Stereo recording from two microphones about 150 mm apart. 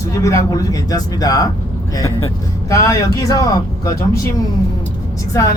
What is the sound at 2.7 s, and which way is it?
A man's voice, 20° left (ahead or behind).